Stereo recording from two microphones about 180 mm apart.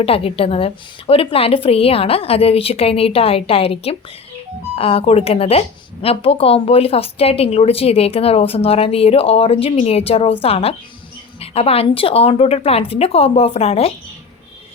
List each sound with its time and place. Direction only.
0.0 s speech: 30° left (ahead or behind)